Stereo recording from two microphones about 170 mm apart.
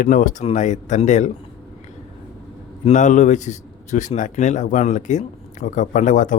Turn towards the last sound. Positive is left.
turn(degrees=50)  # may be behind; listen again after turning